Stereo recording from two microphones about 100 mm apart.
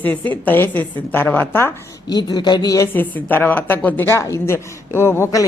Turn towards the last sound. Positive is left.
turn(degrees=30)  # may be behind; listen again after turning